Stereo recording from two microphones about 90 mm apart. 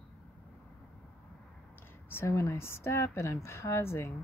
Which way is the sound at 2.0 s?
30° left (ahead or behind).